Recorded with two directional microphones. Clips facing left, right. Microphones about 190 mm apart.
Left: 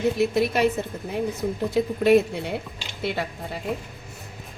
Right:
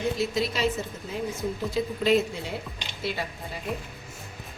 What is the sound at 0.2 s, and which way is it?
A woman's voice, 60° left (ahead or behind).